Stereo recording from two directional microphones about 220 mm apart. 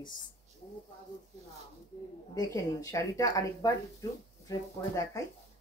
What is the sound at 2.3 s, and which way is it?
Speech, 15° left (ahead or behind).